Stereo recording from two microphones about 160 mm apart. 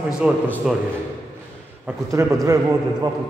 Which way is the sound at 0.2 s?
10° right (ahead or behind).